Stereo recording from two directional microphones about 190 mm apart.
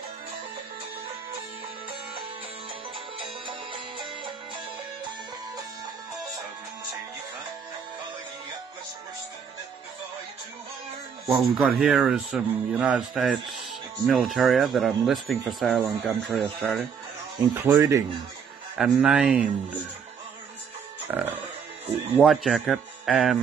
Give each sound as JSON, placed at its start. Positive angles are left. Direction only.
{"t": 3.2, "sound": "music", "side_deg": -25}
{"t": 11.2, "sound": "speech", "side_deg": -5}
{"t": 17.6, "sound": "speech", "side_deg": -15}
{"t": 18.8, "sound": "speech", "side_deg": -5}
{"t": 21.1, "sound": "speech", "side_deg": -10}